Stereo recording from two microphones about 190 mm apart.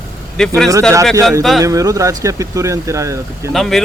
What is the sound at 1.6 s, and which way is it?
Speech, 15° right (ahead or behind).